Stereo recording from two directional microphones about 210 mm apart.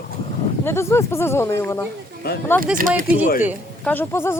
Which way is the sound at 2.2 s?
50° left (ahead or behind).